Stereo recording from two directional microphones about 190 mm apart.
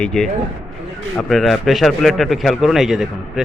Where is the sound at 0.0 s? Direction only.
5° left (ahead or behind).